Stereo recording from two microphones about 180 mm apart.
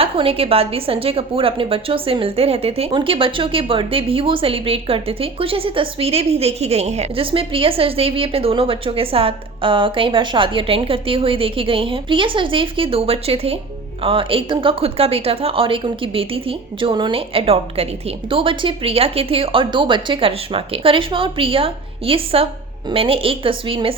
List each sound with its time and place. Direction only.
0.0 s a woman's voice: 30° right (ahead or behind)